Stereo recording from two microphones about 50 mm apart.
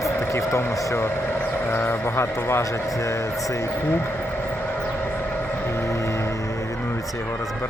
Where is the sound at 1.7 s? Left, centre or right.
Left.